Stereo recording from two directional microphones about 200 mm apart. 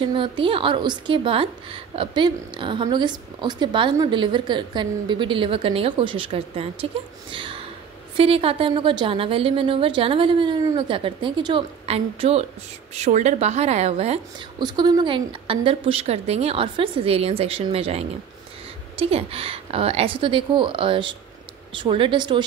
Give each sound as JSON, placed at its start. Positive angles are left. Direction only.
{"t": 0.0, "sound": "a woman's voice", "side_deg": -25}